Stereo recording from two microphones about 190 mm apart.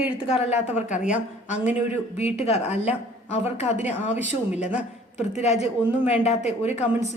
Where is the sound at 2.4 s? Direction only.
30° left (ahead or behind).